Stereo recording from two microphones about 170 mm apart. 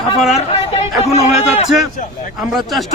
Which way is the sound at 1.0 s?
35° left (ahead or behind).